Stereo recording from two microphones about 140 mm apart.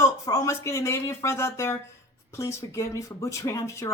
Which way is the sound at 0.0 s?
25° left (ahead or behind).